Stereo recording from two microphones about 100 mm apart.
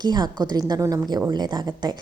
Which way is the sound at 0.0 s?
45° right (ahead or behind).